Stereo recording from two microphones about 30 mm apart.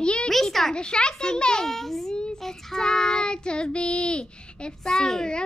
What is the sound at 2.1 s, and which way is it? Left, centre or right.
Speech, left.